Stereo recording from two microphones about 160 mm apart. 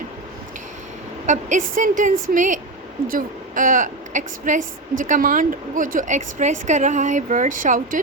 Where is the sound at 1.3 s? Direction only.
50° right (ahead or behind).